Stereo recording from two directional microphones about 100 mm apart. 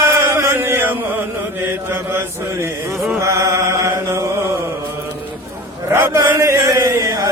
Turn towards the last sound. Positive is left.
turn(degrees=-35)  # may be behind; listen again after turning